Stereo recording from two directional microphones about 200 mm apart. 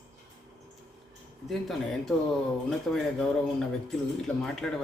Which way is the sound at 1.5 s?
Centre (ahead or behind).